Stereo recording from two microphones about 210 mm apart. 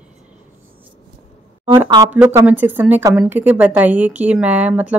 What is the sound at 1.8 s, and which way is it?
Speech, 20° right (ahead or behind).